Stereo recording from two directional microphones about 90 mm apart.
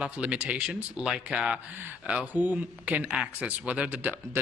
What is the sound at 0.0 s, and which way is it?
Speech, 15° right (ahead or behind).